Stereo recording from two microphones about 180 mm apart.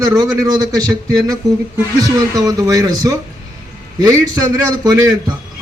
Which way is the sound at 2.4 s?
20° right (ahead or behind).